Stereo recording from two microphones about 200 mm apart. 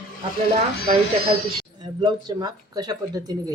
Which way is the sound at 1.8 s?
20° right (ahead or behind).